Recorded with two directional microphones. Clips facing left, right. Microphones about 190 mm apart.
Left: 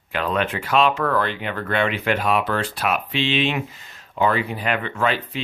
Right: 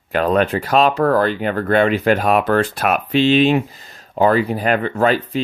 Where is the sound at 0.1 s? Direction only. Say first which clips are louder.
Right 7 dB; 40° right (ahead or behind).